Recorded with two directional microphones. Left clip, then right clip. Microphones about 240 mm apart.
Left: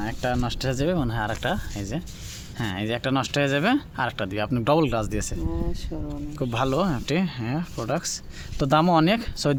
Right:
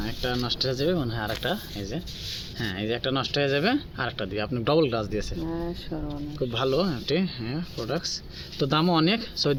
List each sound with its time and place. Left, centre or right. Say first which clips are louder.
0.0 s speech: left 3 dB; left
5.5 s speech: even; centre
6.5 s speech: left 2 dB; left